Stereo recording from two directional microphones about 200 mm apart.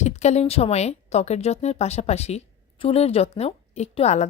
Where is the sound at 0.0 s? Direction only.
35° left (ahead or behind).